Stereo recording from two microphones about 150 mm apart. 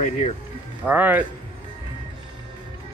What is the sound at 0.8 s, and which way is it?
Speech, 10° right (ahead or behind).